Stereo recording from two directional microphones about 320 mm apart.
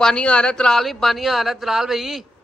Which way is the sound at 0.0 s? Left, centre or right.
Centre.